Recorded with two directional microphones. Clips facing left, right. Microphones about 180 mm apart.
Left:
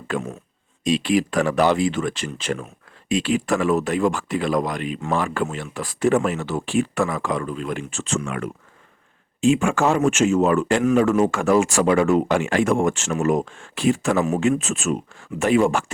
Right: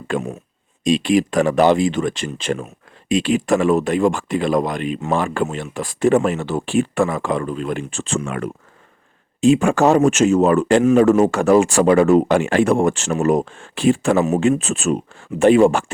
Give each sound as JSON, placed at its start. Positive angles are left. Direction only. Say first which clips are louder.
{"t": 0.1, "sound": "speech", "louder": "right 4 dB", "side_deg": -15}